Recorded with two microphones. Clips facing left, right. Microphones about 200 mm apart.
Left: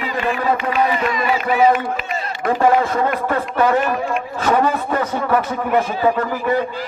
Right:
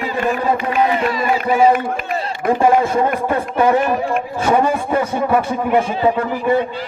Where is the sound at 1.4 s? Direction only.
35° right (ahead or behind).